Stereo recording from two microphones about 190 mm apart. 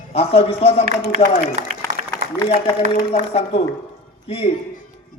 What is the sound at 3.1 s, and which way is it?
Speech, 30° left (ahead or behind).